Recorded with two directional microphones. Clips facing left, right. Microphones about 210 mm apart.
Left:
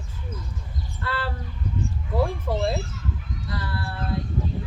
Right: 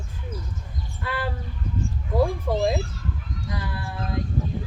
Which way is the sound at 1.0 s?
15° right (ahead or behind).